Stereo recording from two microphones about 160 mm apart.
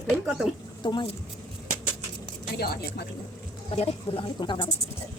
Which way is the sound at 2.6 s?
85° left.